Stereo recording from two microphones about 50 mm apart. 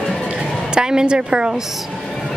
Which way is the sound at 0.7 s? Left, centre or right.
Centre.